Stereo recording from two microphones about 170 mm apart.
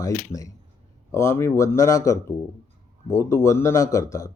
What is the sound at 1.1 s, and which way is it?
Speech, 15° left (ahead or behind).